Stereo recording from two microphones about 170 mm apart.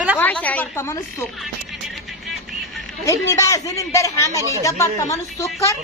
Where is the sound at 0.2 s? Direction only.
10° left (ahead or behind).